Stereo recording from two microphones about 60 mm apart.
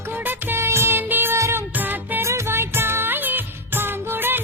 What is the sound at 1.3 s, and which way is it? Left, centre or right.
Music, right.